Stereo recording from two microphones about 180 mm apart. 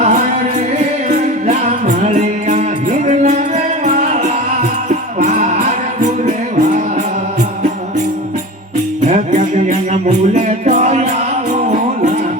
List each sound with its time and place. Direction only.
1.1 s music: 40° right (ahead or behind)
9.6 s music: 40° right (ahead or behind)